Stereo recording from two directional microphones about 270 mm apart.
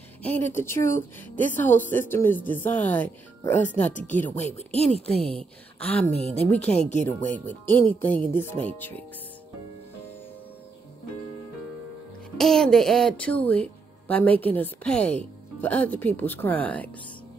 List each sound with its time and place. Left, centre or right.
0.2 s speech: centre
4.4 s speech: left
5.0 s a woman's voice: centre
6.0 s speech: right
7.1 s speech: centre
12.4 s a woman's voice: centre